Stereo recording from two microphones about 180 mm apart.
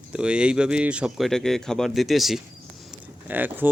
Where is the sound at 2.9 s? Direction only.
10° right (ahead or behind).